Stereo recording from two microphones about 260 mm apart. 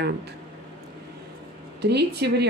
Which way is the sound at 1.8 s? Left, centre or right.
Right.